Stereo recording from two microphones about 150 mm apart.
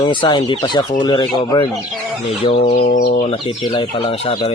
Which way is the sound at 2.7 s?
65° left (ahead or behind).